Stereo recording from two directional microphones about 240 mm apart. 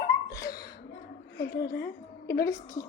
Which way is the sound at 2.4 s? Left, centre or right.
Centre.